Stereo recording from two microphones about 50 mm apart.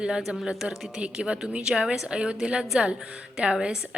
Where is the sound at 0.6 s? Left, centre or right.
Right.